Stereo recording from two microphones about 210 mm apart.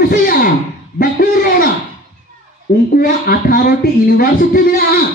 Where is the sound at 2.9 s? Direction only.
45° left (ahead or behind).